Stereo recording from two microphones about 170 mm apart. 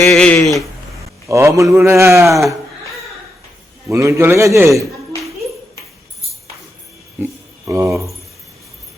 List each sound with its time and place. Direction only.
0.0 s speech: 5° left (ahead or behind)
1.3 s speech: 15° right (ahead or behind)
3.9 s speech: 15° right (ahead or behind)
7.2 s a sound: 15° right (ahead or behind)